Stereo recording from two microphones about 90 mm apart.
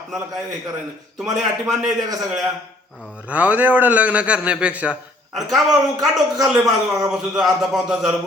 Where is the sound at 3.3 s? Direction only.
20° right (ahead or behind).